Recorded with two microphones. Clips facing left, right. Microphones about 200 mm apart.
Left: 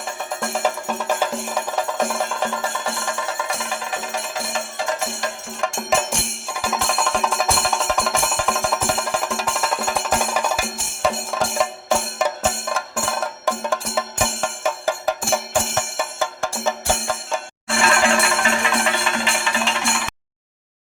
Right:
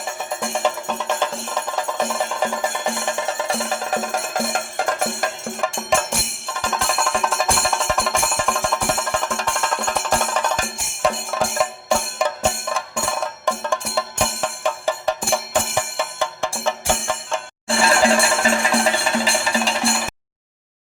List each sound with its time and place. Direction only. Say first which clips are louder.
0.5 s music: even; 5° left (ahead or behind)
2.0 s music: even; 10° right (ahead or behind)
3.4 s music: right 4 dB; 40° right (ahead or behind); by 5.3 s 55° right (ahead or behind)
5.5 s music: even; centre (ahead or behind)
17.8 s music: right 2 dB; 35° right (ahead or behind)